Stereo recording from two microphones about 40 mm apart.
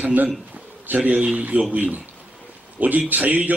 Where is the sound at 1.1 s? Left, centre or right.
Right.